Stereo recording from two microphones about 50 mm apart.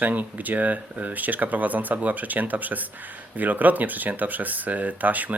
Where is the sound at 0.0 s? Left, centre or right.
Right.